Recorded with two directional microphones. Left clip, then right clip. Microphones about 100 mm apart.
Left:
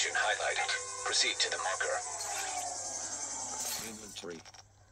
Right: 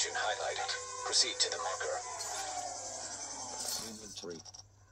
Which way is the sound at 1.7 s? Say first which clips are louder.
Left 3 dB; 45° left (ahead or behind).